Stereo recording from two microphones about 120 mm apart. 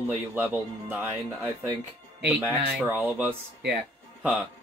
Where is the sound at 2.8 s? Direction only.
15° right (ahead or behind).